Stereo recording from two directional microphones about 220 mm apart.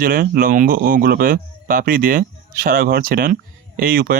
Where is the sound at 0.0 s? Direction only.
40° right (ahead or behind).